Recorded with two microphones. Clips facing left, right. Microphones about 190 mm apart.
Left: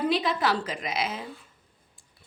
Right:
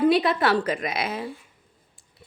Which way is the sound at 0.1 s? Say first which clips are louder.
Right 5 dB; 60° right (ahead or behind).